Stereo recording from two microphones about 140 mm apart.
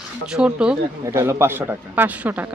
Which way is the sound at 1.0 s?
20° right (ahead or behind).